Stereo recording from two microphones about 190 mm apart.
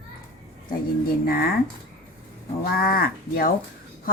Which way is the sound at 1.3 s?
50° left (ahead or behind).